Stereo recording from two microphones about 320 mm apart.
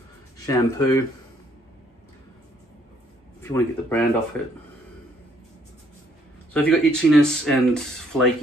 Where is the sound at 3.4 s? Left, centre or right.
Centre.